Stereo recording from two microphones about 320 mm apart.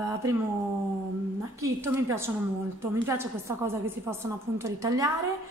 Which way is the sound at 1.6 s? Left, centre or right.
Centre.